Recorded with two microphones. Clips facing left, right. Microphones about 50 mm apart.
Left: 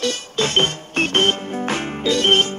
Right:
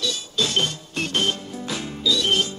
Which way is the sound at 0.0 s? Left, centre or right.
Left.